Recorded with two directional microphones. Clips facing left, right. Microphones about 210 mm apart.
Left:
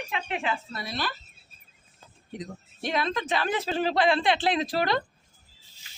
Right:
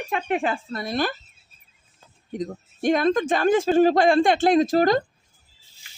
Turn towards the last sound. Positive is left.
turn(degrees=-45)  # may be behind; listen again after turning